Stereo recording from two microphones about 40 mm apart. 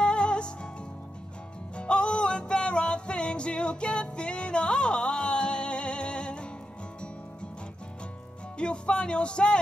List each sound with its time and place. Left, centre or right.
0.0 s music: left
1.8 s music: left
8.5 s speech: left